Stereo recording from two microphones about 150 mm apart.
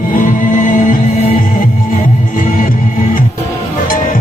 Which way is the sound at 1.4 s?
65° left (ahead or behind).